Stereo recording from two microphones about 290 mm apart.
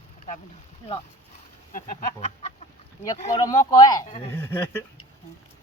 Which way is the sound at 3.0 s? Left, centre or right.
Centre.